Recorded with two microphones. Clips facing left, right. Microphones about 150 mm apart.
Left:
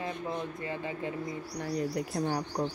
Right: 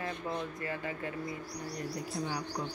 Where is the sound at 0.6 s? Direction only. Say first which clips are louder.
Left 2 dB; 20° left (ahead or behind).